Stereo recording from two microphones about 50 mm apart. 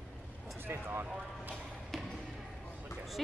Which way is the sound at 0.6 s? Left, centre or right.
Right.